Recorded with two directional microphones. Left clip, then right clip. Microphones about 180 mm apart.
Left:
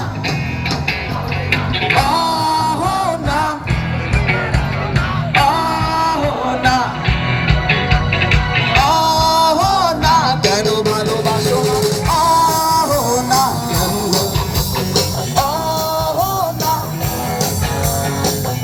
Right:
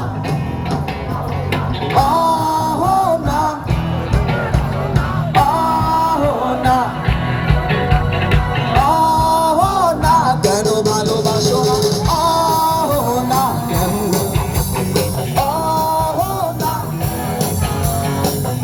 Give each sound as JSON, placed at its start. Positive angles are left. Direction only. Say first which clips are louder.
{"t": 1.5, "sound": "music", "louder": "left 7 dB", "side_deg": -25}
{"t": 5.3, "sound": "music", "louder": "even", "side_deg": -25}
{"t": 11.4, "sound": "music", "louder": "right 1 dB", "side_deg": -30}
{"t": 12.0, "sound": "music", "louder": "left 4 dB", "side_deg": -50}